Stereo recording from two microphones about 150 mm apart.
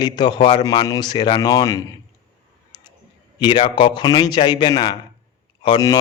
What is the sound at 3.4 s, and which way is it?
Speech, 30° left (ahead or behind).